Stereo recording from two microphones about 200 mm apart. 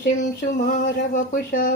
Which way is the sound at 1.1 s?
40° left (ahead or behind).